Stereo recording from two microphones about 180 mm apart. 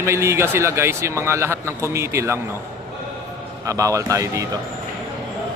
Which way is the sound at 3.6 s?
20° right (ahead or behind).